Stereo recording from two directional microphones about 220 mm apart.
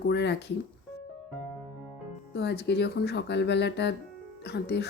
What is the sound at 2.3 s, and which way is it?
Speech, 50° left (ahead or behind).